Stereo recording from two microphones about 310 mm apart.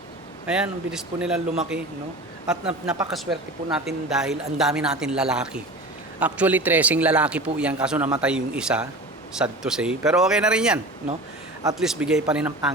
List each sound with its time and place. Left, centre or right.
0.4 s a man's voice: centre